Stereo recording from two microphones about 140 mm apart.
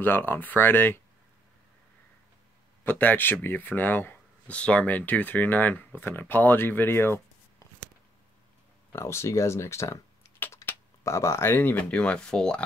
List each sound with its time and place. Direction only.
0.0 s speech: 15° left (ahead or behind)
2.8 s speech: 15° left (ahead or behind)
8.9 s speech: 20° left (ahead or behind)
10.4 s a sound: 15° left (ahead or behind)
11.1 s speech: 20° left (ahead or behind)